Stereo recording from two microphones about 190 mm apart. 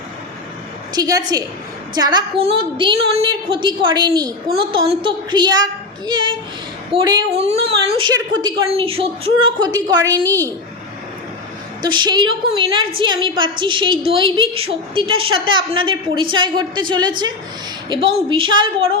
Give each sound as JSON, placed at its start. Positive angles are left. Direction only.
{"t": 0.9, "sound": "a woman's voice", "side_deg": -20}
{"t": 11.8, "sound": "a woman's voice", "side_deg": -25}